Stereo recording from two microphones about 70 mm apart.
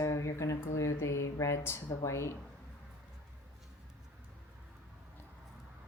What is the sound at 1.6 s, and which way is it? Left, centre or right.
Speech, left.